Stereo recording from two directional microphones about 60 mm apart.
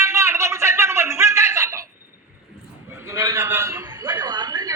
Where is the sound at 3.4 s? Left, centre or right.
Right.